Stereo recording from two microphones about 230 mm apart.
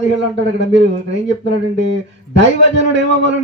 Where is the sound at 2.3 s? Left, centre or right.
Right.